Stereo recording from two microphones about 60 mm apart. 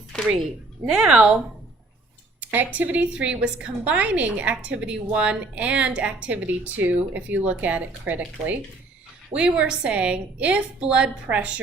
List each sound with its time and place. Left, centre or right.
0.9 s speech: centre
2.4 s a sound: right
2.7 s a woman's voice: right